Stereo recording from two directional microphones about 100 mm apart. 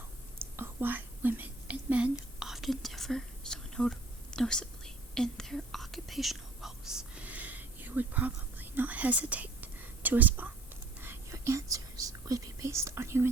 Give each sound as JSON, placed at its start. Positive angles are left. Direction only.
{"t": 0.5, "sound": "whispering", "side_deg": -20}
{"t": 2.4, "sound": "whispering", "side_deg": -5}
{"t": 11.0, "sound": "speech", "side_deg": -25}